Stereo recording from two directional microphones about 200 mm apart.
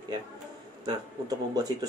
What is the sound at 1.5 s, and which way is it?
Speech, 20° right (ahead or behind).